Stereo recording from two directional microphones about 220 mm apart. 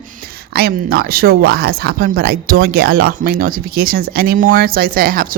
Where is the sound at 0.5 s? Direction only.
45° right (ahead or behind).